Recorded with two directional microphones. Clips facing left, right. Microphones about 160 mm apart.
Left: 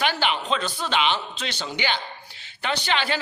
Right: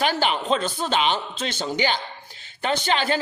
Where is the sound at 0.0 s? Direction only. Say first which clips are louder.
Right 2 dB; 40° right (ahead or behind).